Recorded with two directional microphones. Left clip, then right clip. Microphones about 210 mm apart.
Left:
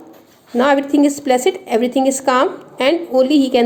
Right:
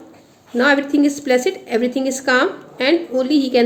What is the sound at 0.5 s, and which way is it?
A woman's voice, 20° left (ahead or behind).